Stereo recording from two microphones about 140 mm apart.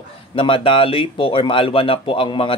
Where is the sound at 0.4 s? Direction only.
40° left (ahead or behind).